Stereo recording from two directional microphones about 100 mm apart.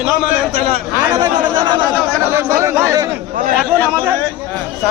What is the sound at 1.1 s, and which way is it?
Speech, 45° right (ahead or behind).